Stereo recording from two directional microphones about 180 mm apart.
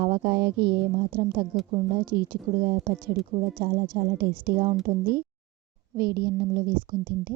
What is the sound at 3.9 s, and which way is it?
Speech, 60° right (ahead or behind).